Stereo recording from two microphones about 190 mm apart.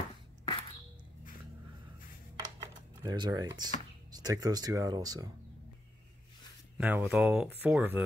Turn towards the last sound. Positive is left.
turn(degrees=-10)  # may be behind; listen again after turning